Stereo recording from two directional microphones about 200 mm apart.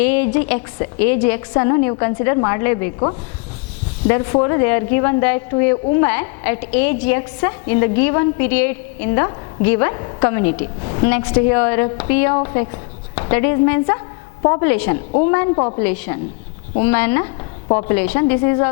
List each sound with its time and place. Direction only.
0.0 s a sound: 10° left (ahead or behind)
0.3 s a woman's voice: 10° left (ahead or behind)
4.0 s a woman's voice: 15° left (ahead or behind)
15.5 s a woman's voice: 25° left (ahead or behind)
15.8 s a woman's voice: 15° left (ahead or behind)